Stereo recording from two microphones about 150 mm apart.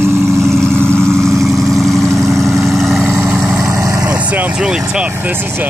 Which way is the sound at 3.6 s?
20° right (ahead or behind).